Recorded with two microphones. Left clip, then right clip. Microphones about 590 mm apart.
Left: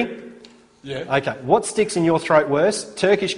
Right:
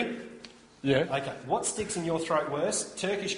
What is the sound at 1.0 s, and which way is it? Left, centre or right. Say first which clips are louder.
Speech: left 12 dB; left.